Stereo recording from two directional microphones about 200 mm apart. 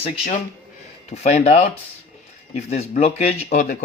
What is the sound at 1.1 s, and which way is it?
Speech, 35° left (ahead or behind).